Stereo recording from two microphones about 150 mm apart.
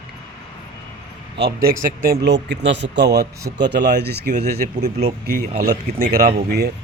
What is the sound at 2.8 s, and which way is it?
Speech, 90° right.